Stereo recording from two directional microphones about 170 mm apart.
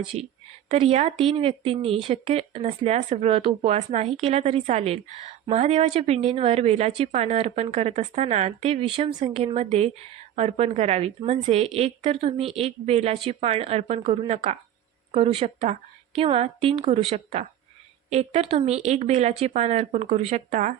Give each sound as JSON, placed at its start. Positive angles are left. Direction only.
{"t": 0.0, "sound": "speech", "side_deg": -35}